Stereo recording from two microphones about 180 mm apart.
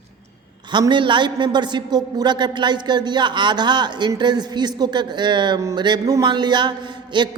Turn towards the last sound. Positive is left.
turn(degrees=-25)  # may be behind; listen again after turning